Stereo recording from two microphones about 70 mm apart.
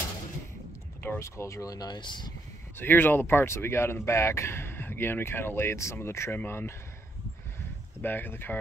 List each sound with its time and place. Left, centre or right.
1.2 s speech: left
2.8 s speech: left
8.0 s speech: left